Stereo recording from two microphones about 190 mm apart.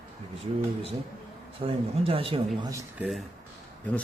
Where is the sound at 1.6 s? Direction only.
30° right (ahead or behind).